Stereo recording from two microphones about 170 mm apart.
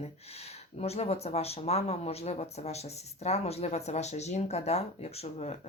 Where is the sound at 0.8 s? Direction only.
35° left (ahead or behind).